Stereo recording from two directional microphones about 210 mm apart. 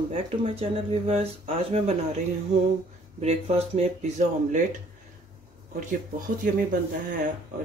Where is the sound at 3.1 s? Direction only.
30° right (ahead or behind).